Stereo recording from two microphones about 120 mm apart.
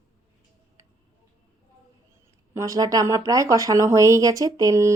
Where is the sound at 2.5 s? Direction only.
25° right (ahead or behind).